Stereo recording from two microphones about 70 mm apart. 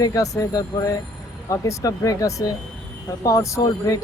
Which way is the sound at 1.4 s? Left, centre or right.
Left.